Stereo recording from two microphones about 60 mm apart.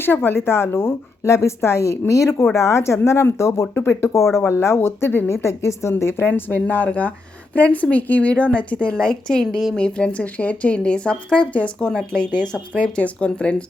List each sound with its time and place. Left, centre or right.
0.0 s a woman's voice: left
5.9 s speech: left; by 13.7 s centre